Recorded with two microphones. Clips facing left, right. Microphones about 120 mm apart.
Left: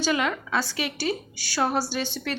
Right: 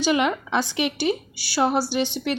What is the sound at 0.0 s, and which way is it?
Speech, 20° right (ahead or behind).